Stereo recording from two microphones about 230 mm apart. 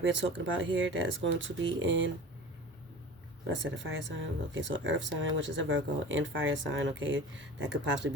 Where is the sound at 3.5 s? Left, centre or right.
Right.